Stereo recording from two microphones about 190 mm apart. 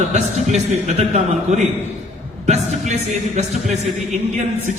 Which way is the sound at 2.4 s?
35° right (ahead or behind).